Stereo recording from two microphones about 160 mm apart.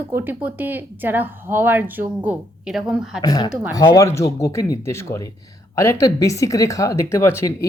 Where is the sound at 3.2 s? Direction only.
25° left (ahead or behind).